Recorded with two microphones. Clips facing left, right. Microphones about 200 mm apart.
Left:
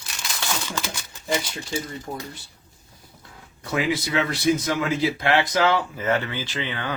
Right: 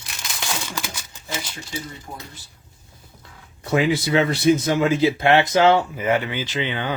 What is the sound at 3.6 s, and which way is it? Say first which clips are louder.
Speech: right 5 dB; 25° right (ahead or behind).